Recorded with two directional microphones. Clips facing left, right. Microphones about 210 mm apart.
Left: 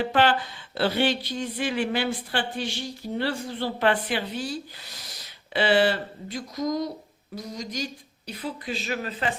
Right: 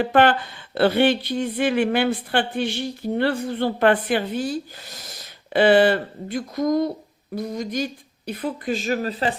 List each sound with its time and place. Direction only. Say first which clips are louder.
0.0 s speech: right 5 dB; 55° right (ahead or behind)
5.5 s speech: right 6 dB; 55° right (ahead or behind)